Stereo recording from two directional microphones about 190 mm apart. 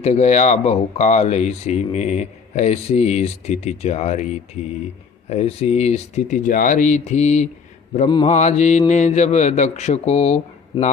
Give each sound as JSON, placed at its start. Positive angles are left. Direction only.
{"t": 0.0, "sound": "speech", "side_deg": 35}
{"t": 5.3, "sound": "speech", "side_deg": 30}
{"t": 7.9, "sound": "mantra", "side_deg": 25}
{"t": 8.3, "sound": "speech", "side_deg": 40}